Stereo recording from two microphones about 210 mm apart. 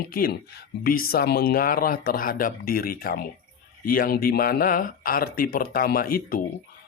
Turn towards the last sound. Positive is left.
turn(degrees=45)  # may be behind; listen again after turning